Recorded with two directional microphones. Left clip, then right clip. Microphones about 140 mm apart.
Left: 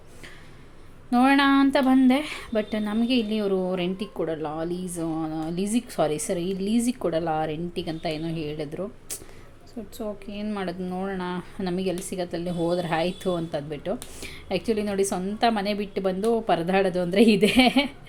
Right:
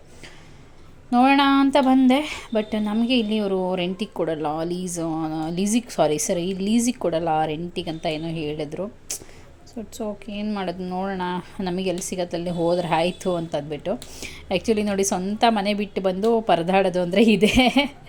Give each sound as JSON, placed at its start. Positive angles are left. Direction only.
{"t": 1.1, "sound": "a woman's voice", "side_deg": -15}